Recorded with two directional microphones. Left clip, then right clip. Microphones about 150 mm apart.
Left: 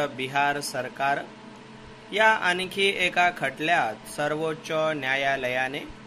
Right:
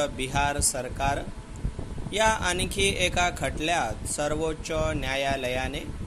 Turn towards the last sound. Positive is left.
turn(degrees=-40)  # may be behind; listen again after turning